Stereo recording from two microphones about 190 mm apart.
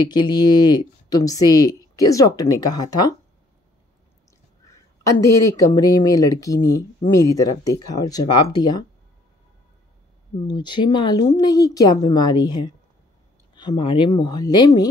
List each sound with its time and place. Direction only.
0.0 s speech: 20° left (ahead or behind)
4.6 s speech: 15° left (ahead or behind)
10.4 s speech: 20° left (ahead or behind)